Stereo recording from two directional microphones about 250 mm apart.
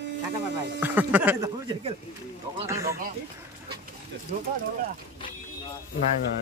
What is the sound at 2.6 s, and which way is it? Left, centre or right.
Speech, centre.